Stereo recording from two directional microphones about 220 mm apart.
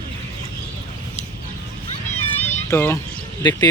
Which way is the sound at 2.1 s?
30° left (ahead or behind).